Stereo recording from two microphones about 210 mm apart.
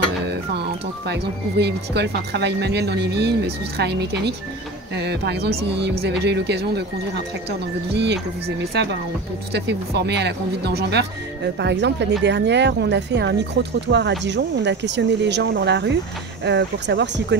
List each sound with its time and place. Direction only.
1.0 s speech: 55° right (ahead or behind)
7.9 s speech: 55° right (ahead or behind)